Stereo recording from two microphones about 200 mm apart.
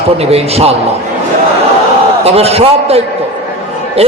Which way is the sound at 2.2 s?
30° right (ahead or behind).